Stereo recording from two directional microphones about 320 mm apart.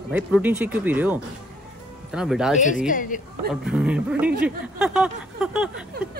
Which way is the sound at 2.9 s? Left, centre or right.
Left.